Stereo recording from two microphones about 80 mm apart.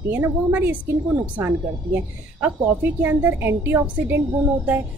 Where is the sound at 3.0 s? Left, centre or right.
Right.